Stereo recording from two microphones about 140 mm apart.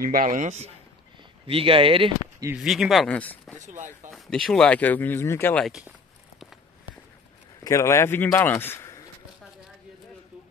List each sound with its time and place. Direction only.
0.0 s speech: 70° right (ahead or behind)
1.5 s speech: 40° right (ahead or behind)
2.5 s speech: 5° right (ahead or behind)
3.1 s speech: 10° left (ahead or behind)
3.6 s speech: 60° right (ahead or behind)
4.1 s speech: centre (ahead or behind)
5.7 s speech: 5° right (ahead or behind)
7.6 s a man's voice: 20° left (ahead or behind)